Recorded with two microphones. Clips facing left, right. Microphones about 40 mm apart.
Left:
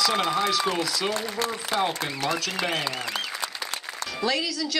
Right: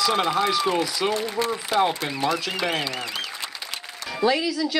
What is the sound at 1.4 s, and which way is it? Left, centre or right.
Speech, right.